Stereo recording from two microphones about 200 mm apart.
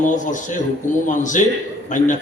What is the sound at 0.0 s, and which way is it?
A man's voice, 40° left (ahead or behind).